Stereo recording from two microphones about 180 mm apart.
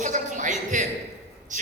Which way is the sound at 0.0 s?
45° right (ahead or behind).